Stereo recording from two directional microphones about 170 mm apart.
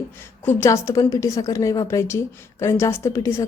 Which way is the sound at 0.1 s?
15° left (ahead or behind).